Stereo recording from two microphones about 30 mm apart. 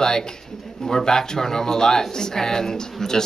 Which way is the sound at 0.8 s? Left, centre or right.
Centre.